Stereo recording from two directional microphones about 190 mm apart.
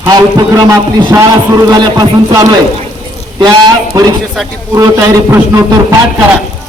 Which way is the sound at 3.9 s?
20° right (ahead or behind).